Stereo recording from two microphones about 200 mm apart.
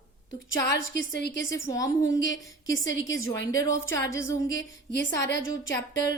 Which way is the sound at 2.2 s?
70° left (ahead or behind).